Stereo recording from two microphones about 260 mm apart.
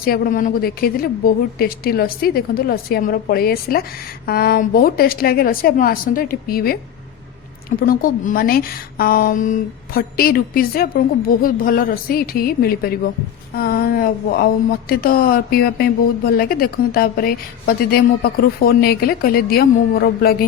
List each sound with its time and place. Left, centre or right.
0.0 s speech: left
7.8 s speech: left